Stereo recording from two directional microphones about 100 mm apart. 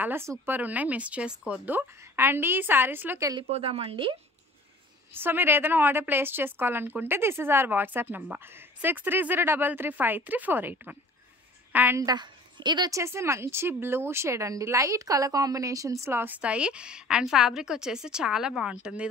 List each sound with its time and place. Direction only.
0.0 s a woman's voice: 25° right (ahead or behind)
3.4 s speech: 80° right; by 4.2 s 60° right (ahead or behind)
5.1 s a woman's voice: 20° right (ahead or behind)
12.0 s a woman's voice: 45° right (ahead or behind)
12.9 s a woman's voice: 30° right (ahead or behind); by 19.0 s 10° right (ahead or behind)